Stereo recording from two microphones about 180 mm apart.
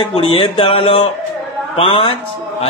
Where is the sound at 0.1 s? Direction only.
30° left (ahead or behind).